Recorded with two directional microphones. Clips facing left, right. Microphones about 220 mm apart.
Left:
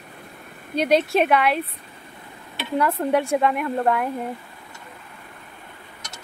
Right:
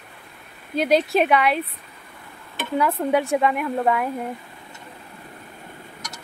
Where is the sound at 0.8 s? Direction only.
Centre (ahead or behind).